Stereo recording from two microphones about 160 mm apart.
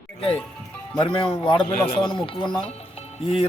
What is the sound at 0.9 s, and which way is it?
Speech, 30° left (ahead or behind).